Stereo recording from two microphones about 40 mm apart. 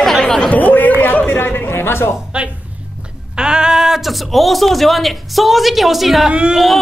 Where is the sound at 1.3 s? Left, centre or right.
Left.